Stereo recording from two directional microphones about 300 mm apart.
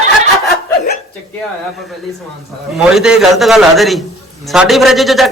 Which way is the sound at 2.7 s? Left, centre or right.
Centre.